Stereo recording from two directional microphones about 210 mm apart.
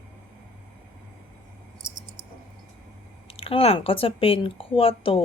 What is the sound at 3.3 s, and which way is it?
Speech, 25° left (ahead or behind).